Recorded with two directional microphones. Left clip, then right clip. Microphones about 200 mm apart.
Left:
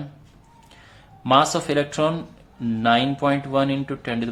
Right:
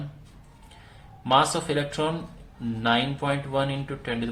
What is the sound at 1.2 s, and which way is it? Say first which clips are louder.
Speech: left 4 dB; 35° left (ahead or behind).